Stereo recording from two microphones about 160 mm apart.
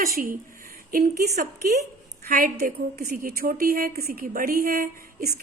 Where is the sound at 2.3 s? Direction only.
55° right (ahead or behind).